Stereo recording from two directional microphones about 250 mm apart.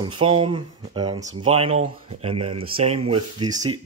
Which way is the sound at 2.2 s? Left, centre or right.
Right.